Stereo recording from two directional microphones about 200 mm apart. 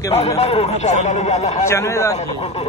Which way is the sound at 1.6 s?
15° left (ahead or behind).